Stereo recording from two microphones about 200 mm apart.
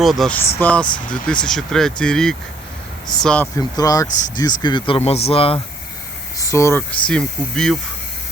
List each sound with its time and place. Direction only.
0.0 s speech: centre (ahead or behind)
3.6 s speech: 20° left (ahead or behind)
6.3 s speech: 15° left (ahead or behind)
7.1 s speech: 5° left (ahead or behind)